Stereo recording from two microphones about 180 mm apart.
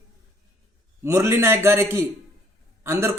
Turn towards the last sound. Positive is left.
turn(degrees=-15)  # may be behind; listen again after turning